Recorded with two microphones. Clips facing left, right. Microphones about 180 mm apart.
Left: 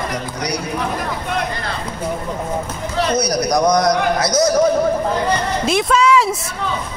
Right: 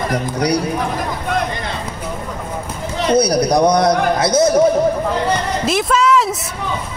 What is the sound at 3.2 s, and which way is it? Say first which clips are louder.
A man's voice: right 5 dB; 30° right (ahead or behind).